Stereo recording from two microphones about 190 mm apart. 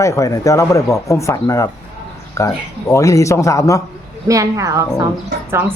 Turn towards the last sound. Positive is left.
turn(degrees=-10)  # may be behind; listen again after turning